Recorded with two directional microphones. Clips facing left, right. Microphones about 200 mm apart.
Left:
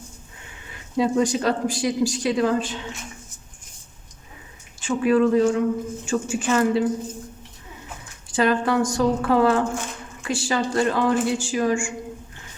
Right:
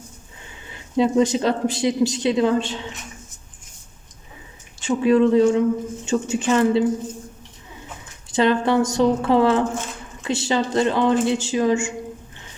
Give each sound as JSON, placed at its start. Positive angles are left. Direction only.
{"t": 0.7, "sound": "speech", "side_deg": -25}
{"t": 4.9, "sound": "speech", "side_deg": -25}
{"t": 8.3, "sound": "speech", "side_deg": -25}